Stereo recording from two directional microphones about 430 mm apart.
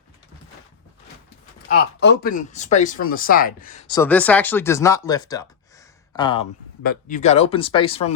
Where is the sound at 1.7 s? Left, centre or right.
Left.